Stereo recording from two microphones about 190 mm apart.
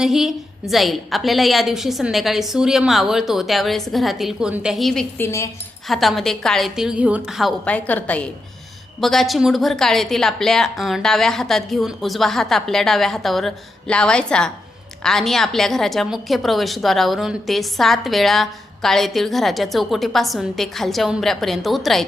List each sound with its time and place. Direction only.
0.0 s a woman's voice: centre (ahead or behind)
5.2 s speech: 15° left (ahead or behind)
5.9 s a woman's voice: centre (ahead or behind)